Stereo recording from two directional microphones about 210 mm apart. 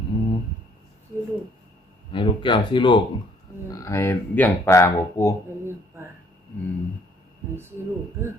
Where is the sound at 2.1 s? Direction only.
25° left (ahead or behind).